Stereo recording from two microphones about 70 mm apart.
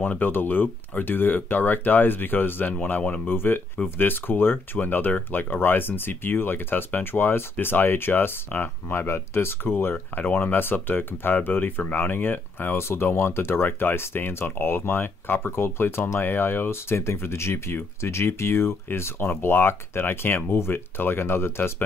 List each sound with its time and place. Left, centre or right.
0.0 s speech: left